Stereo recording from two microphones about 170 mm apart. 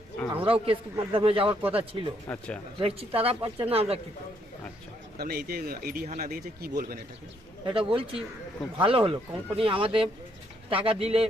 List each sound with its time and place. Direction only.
0.4 s speech: 35° right (ahead or behind)
2.3 s speech: 10° left (ahead or behind)
2.7 s speech: 35° right (ahead or behind)
5.1 s speech: 65° right (ahead or behind)
7.6 s speech: 30° right (ahead or behind)